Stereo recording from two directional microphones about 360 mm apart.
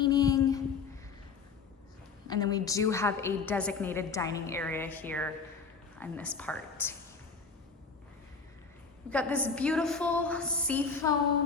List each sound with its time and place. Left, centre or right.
0.0 s a sound: centre
2.2 s a woman's voice: centre
9.0 s a woman's voice: centre